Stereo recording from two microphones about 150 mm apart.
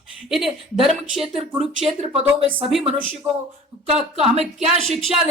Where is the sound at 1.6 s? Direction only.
45° right (ahead or behind).